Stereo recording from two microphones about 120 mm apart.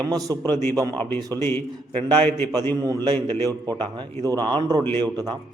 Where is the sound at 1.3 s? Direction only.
20° left (ahead or behind).